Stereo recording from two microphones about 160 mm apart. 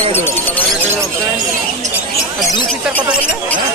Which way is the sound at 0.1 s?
15° left (ahead or behind).